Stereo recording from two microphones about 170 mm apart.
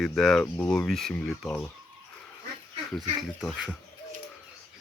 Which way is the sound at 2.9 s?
Centre (ahead or behind).